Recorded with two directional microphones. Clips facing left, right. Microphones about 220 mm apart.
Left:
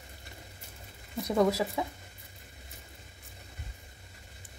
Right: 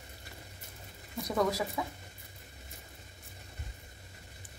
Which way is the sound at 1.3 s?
25° left (ahead or behind).